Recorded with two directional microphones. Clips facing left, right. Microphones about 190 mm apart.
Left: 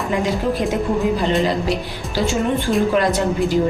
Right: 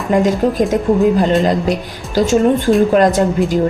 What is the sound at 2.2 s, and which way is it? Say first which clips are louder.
A woman's voice: right 7 dB; 45° right (ahead or behind).